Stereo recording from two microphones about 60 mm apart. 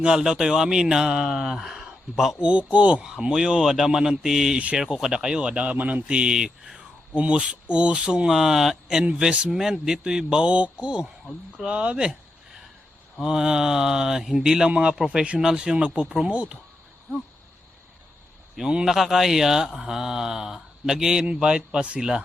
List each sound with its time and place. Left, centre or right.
0.0 s speech: centre
2.4 s speech: centre
3.0 s speech: centre
4.5 s speech: centre
4.9 s speech: centre
9.0 s speech: centre
13.2 s speech: centre
18.5 s speech: centre